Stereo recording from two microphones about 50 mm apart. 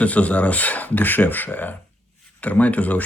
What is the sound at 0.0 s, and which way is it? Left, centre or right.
Speech, left.